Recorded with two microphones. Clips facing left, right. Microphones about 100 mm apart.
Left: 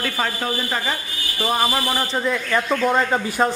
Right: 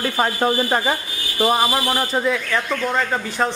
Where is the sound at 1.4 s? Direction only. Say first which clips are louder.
Right 3 dB; 15° right (ahead or behind).